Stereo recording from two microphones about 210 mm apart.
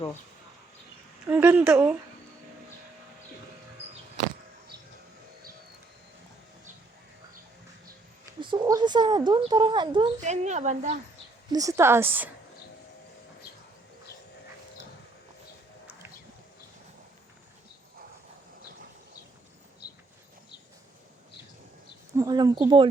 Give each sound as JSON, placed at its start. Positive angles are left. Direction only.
{"t": 1.3, "sound": "a woman's voice", "side_deg": -5}
{"t": 8.4, "sound": "speech", "side_deg": -20}
{"t": 10.2, "sound": "speech", "side_deg": -35}
{"t": 11.5, "sound": "a woman's voice", "side_deg": -15}
{"t": 22.2, "sound": "speech", "side_deg": -20}